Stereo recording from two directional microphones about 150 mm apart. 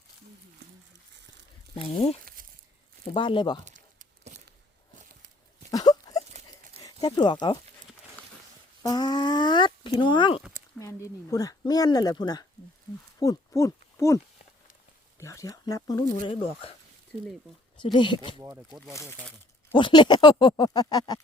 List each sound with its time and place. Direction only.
1.7 s speech: 35° left (ahead or behind)
2.2 s crumpling: 70° right (ahead or behind)
3.0 s speech: 35° left (ahead or behind)
3.6 s crumpling: 55° right (ahead or behind)
5.7 s a sound: 25° left (ahead or behind)
6.8 s speech: 25° left (ahead or behind)
8.8 s speech: 25° left (ahead or behind)
10.8 s speech: 20° left (ahead or behind)
15.2 s speech: 20° left (ahead or behind)
16.3 s speech: 40° left (ahead or behind)
17.9 s speech: 30° left (ahead or behind)
19.7 s speech: 30° left (ahead or behind)